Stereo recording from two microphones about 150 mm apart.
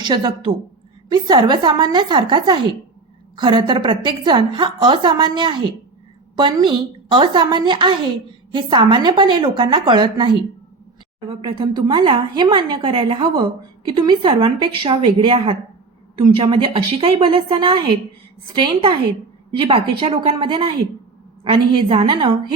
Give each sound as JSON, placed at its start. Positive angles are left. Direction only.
{"t": 0.0, "sound": "a woman's voice", "side_deg": -30}